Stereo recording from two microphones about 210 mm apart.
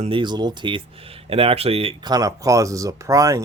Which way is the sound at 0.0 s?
25° right (ahead or behind).